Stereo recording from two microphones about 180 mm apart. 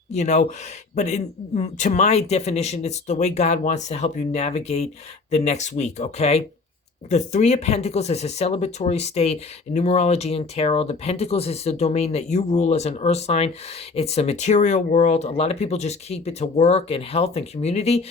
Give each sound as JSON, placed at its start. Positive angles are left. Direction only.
{"t": 0.1, "sound": "speech", "side_deg": 40}